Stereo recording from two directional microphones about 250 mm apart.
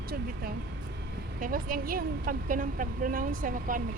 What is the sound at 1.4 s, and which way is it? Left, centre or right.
A woman's voice, right.